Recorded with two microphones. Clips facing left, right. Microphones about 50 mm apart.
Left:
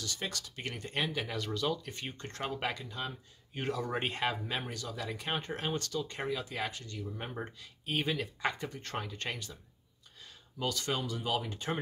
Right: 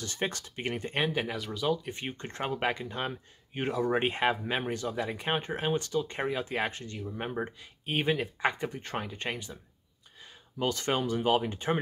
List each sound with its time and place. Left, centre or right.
0.0 s speech: right
1.3 s speech: centre
1.9 s speech: right
2.9 s speech: right
3.5 s speech: right
10.6 s speech: right